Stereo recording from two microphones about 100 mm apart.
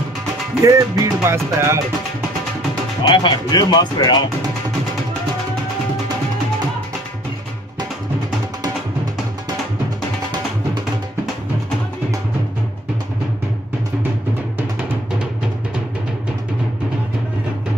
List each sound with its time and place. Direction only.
0.7 s music: 30° right (ahead or behind)
3.0 s speech: 50° left (ahead or behind)